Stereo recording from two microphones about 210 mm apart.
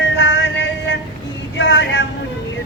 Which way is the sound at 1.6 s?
60° left (ahead or behind).